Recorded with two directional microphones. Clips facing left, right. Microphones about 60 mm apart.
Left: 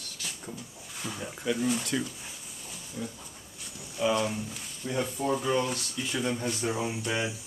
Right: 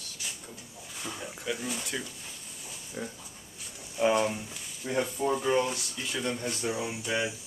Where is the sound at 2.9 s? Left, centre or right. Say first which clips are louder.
Even; right.